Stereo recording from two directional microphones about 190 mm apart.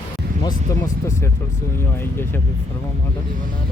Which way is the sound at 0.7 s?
15° left (ahead or behind).